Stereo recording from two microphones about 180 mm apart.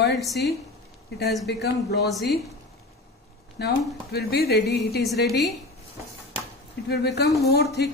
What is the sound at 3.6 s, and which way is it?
Speech, 65° left (ahead or behind).